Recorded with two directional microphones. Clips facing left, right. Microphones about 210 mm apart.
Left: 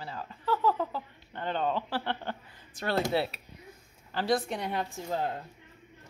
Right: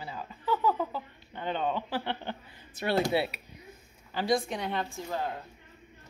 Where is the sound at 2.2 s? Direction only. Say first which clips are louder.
Even; 20° right (ahead or behind).